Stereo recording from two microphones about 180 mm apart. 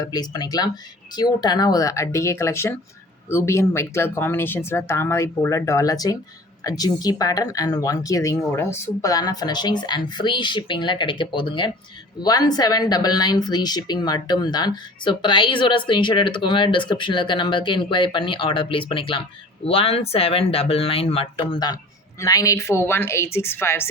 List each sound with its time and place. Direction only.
0.0 s a woman's voice: 20° left (ahead or behind)